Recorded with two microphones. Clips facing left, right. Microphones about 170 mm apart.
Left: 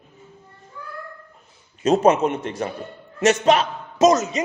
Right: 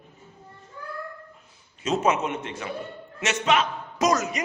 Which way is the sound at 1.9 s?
35° left (ahead or behind).